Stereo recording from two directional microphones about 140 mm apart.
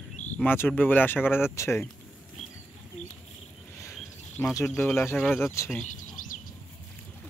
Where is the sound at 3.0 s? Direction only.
60° left (ahead or behind).